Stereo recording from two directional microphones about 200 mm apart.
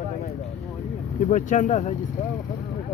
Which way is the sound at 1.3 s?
35° left (ahead or behind).